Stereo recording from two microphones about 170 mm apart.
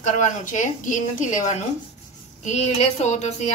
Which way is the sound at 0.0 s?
45° left (ahead or behind).